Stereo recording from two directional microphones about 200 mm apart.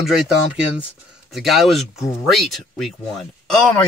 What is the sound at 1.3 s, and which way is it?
Speech, centre (ahead or behind).